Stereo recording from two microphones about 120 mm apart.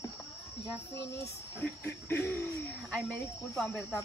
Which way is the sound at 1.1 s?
20° left (ahead or behind).